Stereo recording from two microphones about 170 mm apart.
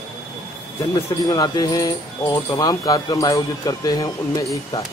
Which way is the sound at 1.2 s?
25° left (ahead or behind).